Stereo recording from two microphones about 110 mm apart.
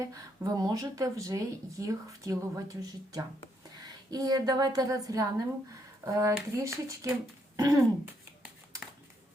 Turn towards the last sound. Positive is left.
turn(degrees=-30)  # may be behind; listen again after turning